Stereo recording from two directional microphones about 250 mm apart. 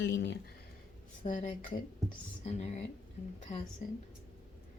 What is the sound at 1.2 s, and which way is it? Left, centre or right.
Speech, left.